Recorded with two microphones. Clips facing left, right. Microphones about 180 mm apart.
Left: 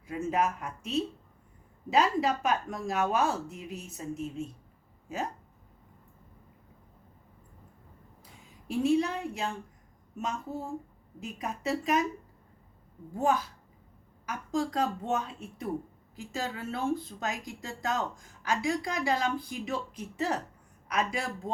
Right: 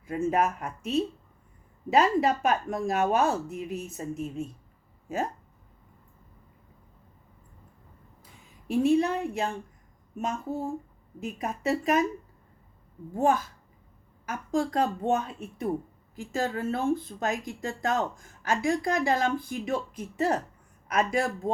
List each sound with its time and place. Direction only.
0.1 s speech: 50° right (ahead or behind)
8.6 s speech: 50° right (ahead or behind)
11.2 s speech: 50° right (ahead or behind)
13.1 s speech: 50° right (ahead or behind)